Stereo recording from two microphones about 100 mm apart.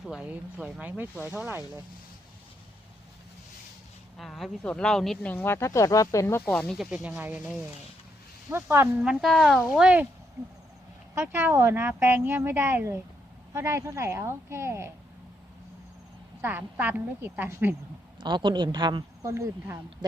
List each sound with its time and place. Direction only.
0.0 s speech: 10° right (ahead or behind)
4.2 s speech: centre (ahead or behind)
5.2 s speech: 20° left (ahead or behind)
6.4 s speech: 10° left (ahead or behind)
6.7 s speech: 5° right (ahead or behind)
7.2 s speech: 15° right (ahead or behind)
9.0 s speech: 5° right (ahead or behind)
11.1 s speech: 25° right (ahead or behind)
16.4 s speech: 20° right (ahead or behind)
18.2 s a woman's voice: 50° right (ahead or behind)
19.2 s speech: 30° right (ahead or behind)